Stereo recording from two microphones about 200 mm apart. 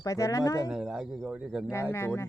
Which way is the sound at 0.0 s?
15° left (ahead or behind).